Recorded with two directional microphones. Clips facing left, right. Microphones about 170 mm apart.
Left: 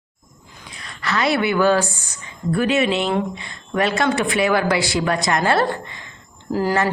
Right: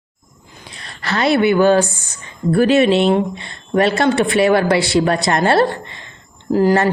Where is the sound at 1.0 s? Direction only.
30° right (ahead or behind).